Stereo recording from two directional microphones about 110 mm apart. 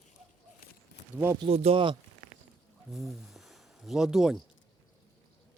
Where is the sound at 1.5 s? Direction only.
65° right (ahead or behind).